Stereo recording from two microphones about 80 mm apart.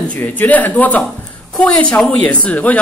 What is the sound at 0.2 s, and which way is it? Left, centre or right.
Speech, left.